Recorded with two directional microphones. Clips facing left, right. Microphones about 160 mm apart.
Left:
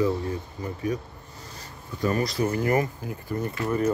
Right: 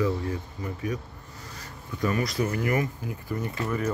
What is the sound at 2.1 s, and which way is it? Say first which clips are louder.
Speech: left 3 dB; 30° left (ahead or behind).